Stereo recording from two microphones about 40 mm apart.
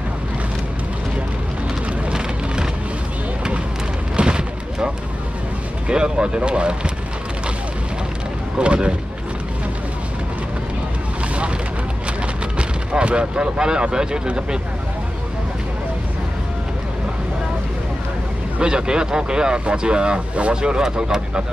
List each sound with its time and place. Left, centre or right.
2.0 s vehicle: centre
4.2 s a sound: right
5.9 s speech: right
8.5 s speech: right
12.5 s speech: right
18.6 s speech: right